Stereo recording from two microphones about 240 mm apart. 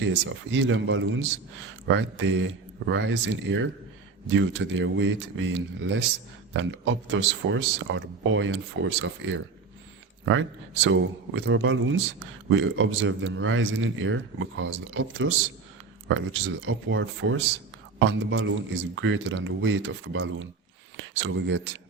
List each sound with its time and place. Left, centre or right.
0.5 s a man's voice: right
10.8 s a man's voice: right